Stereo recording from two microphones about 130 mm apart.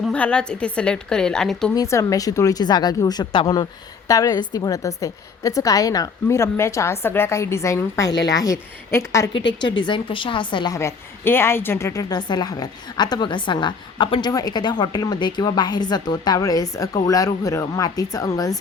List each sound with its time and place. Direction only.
0.1 s a woman's voice: 10° left (ahead or behind)
1.7 s a woman's voice: 25° left (ahead or behind)
9.3 s a woman's voice: 35° left (ahead or behind)
10.8 s a woman's voice: 20° left (ahead or behind)